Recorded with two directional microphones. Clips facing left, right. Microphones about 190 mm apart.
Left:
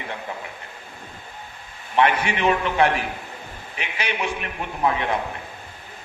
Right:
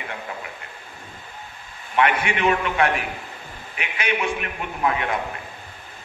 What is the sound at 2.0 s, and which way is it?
Speech, 30° left (ahead or behind).